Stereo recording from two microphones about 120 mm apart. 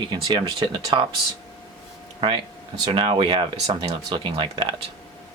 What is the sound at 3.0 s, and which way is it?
Speech, 45° right (ahead or behind).